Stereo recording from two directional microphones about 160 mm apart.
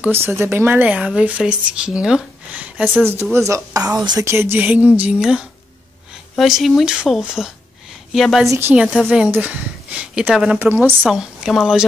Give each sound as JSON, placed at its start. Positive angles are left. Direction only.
{"t": 0.0, "sound": "speech", "side_deg": -15}
{"t": 3.3, "sound": "a woman's voice", "side_deg": -20}
{"t": 8.5, "sound": "speech", "side_deg": -15}